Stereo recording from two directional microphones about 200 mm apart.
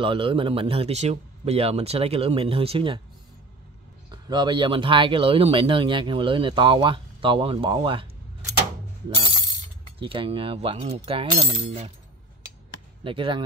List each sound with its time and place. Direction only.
0.0 s speech: 25° right (ahead or behind)
4.1 s speech: 20° right (ahead or behind)
9.9 s speech: 25° right (ahead or behind)
13.0 s speech: 25° right (ahead or behind)